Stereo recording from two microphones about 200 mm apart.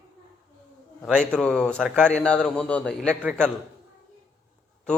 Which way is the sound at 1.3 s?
5° left (ahead or behind).